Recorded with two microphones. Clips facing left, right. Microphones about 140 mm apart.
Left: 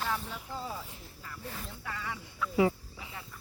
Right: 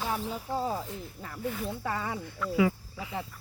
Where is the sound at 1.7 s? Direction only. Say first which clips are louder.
Right 7 dB; 40° right (ahead or behind).